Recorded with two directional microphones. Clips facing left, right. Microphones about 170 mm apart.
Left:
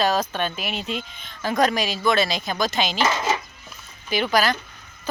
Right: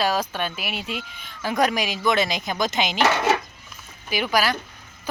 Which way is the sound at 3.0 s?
65° right (ahead or behind).